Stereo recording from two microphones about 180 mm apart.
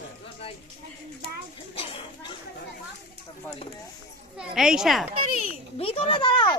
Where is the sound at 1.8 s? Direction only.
30° left (ahead or behind).